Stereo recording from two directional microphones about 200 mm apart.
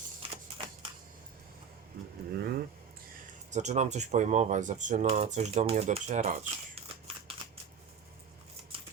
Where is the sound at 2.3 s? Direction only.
50° right (ahead or behind).